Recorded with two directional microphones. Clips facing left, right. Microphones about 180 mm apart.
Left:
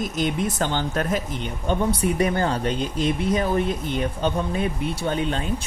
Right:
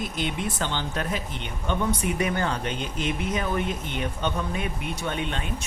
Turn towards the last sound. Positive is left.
turn(degrees=35)  # may be behind; listen again after turning